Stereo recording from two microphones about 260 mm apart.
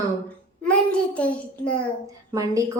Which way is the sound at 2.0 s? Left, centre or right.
Centre.